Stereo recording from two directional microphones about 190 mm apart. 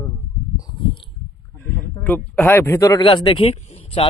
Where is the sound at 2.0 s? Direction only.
10° left (ahead or behind).